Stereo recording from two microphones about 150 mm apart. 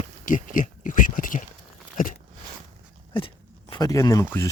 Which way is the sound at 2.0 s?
65° left (ahead or behind).